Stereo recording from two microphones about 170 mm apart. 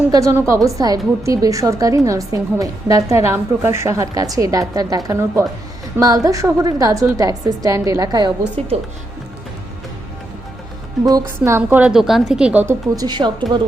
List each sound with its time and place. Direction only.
0.1 s a woman's voice: 20° right (ahead or behind)
11.4 s a woman's voice: 15° right (ahead or behind)
13.0 s a woman's voice: 25° right (ahead or behind)